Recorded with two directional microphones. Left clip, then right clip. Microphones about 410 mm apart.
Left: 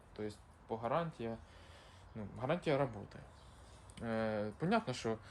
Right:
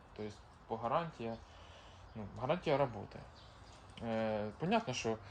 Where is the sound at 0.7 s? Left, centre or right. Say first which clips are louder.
Right 1 dB; centre.